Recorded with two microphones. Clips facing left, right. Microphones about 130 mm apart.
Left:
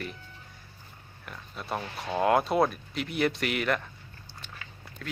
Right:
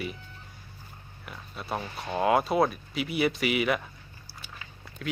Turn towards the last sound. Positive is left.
turn(degrees=-5)  # may be behind; listen again after turning